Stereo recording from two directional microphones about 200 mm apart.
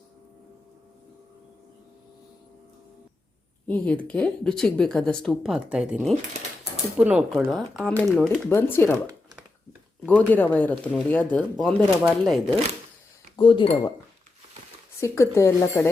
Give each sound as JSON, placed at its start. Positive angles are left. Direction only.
{"t": 3.7, "sound": "speech", "side_deg": 5}
{"t": 10.1, "sound": "speech", "side_deg": 10}
{"t": 13.3, "sound": "speech", "side_deg": 25}
{"t": 15.0, "sound": "speech", "side_deg": 15}